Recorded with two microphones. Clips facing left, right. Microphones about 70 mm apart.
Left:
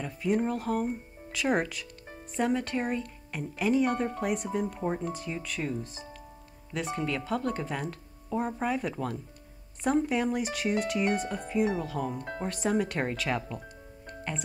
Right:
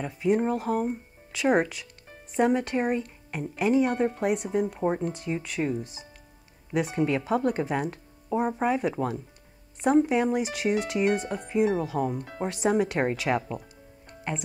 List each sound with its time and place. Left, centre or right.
0.0 s speech: centre
5.0 s speech: centre